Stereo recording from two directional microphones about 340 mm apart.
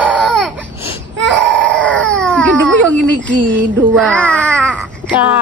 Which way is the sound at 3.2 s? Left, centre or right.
Right.